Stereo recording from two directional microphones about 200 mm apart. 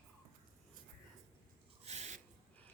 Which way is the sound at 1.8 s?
35° right (ahead or behind).